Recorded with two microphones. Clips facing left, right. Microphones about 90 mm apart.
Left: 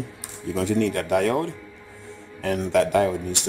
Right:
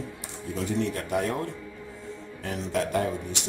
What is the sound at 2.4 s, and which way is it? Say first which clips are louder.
Speech: left 8 dB; 80° left.